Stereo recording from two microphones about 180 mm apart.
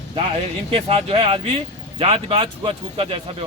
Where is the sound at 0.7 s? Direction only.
30° right (ahead or behind).